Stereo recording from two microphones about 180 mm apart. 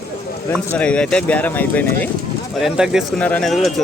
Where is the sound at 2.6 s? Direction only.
5° right (ahead or behind).